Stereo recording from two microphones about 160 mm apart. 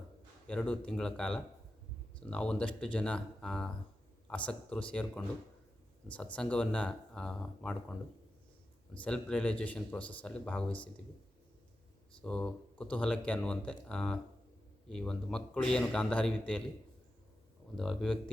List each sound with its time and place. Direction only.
0.4 s speech: 5° left (ahead or behind)
6.3 s speech: 5° left (ahead or behind)
9.0 s speech: 5° left (ahead or behind)
12.2 s speech: 5° left (ahead or behind)
17.7 s speech: centre (ahead or behind)